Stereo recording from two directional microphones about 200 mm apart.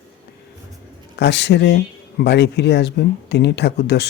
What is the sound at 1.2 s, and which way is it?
Speech, 60° left (ahead or behind).